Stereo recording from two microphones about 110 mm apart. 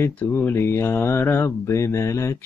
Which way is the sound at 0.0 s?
15° left (ahead or behind).